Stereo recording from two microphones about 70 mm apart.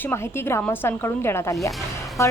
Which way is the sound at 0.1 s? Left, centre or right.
Left.